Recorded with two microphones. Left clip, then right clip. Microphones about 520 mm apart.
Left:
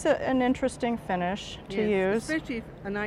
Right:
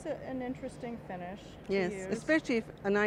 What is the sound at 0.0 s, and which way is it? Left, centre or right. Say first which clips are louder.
Speech: left 14 dB; left.